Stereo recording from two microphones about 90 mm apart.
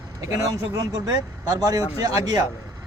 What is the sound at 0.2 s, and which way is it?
A man's voice, 40° right (ahead or behind).